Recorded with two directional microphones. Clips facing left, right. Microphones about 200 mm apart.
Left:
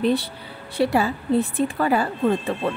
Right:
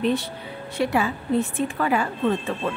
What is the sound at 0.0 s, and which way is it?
Speech, 35° left (ahead or behind).